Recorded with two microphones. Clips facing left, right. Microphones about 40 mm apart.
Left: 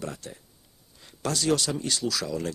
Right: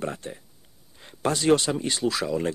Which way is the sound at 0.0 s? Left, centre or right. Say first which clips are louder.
Right 5 dB; right.